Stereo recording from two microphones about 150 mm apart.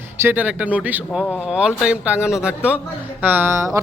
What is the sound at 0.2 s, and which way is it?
Speech, 10° right (ahead or behind).